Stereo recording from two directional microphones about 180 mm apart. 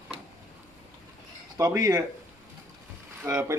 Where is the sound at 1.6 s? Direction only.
20° right (ahead or behind).